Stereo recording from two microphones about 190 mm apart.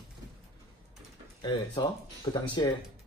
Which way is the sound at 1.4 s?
25° left (ahead or behind).